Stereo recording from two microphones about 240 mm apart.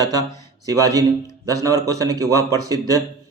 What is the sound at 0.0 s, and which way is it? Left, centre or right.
Speech, centre.